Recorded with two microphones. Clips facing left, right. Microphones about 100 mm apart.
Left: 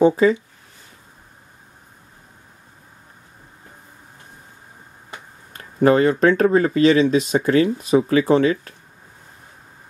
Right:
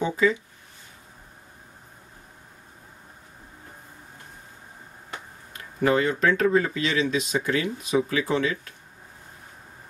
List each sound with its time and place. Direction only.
0.0 s speech: 40° left (ahead or behind)
5.5 s speech: 40° left (ahead or behind)